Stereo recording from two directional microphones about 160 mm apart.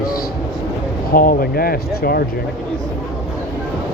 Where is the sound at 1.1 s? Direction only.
60° left (ahead or behind).